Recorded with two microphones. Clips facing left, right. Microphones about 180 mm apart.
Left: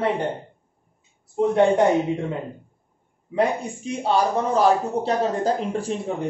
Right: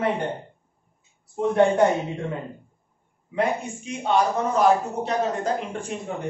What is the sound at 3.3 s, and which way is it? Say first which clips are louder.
A man's voice: left 2 dB; 35° left (ahead or behind).